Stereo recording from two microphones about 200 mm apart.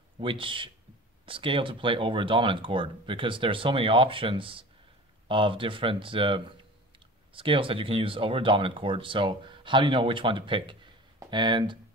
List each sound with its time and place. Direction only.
0.2 s speech: 25° right (ahead or behind)